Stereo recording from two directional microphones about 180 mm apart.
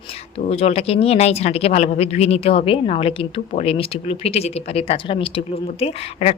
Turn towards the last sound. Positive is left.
turn(degrees=35)  # may be behind; listen again after turning